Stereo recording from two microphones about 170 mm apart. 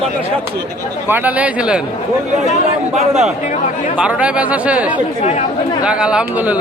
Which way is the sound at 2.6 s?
40° right (ahead or behind).